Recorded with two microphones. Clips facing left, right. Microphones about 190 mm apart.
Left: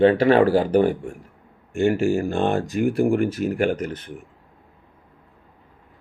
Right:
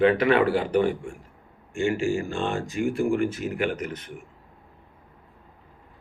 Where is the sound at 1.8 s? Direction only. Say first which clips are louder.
Left 5 dB; 60° left (ahead or behind).